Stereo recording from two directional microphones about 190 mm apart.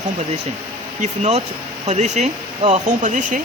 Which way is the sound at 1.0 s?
35° right (ahead or behind).